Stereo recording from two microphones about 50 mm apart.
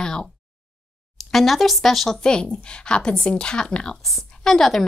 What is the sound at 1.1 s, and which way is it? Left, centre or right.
Speech, centre.